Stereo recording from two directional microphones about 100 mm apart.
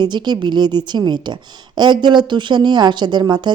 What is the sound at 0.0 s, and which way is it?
A woman's voice, 45° right (ahead or behind).